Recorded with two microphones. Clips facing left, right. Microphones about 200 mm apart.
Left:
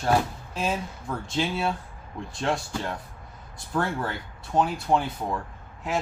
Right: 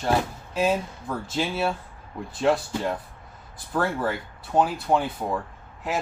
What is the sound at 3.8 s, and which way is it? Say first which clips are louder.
Speech: right 3 dB; 5° right (ahead or behind).